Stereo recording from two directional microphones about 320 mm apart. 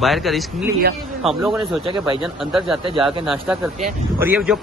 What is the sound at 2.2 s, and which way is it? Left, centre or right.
Speech, centre.